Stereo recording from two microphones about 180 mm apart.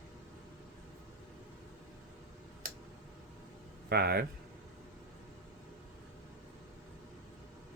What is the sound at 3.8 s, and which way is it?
Speech, 60° right (ahead or behind).